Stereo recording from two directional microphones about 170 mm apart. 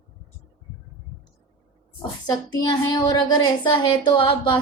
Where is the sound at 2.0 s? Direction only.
25° left (ahead or behind).